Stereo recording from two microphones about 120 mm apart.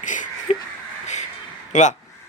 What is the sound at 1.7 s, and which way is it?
Speech, 85° left.